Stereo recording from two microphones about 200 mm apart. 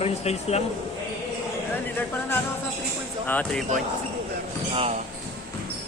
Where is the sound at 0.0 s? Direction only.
30° left (ahead or behind).